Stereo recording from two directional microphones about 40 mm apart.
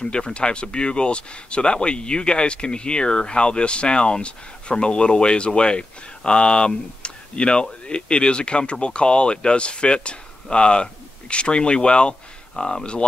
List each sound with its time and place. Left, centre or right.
0.0 s speech: left